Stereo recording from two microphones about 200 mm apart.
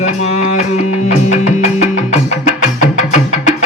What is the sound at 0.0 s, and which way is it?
Music, 35° left (ahead or behind).